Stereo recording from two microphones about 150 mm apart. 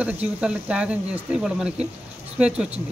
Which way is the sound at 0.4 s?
5° right (ahead or behind).